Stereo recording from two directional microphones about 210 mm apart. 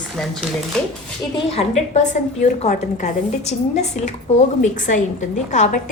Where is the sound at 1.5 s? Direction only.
30° left (ahead or behind).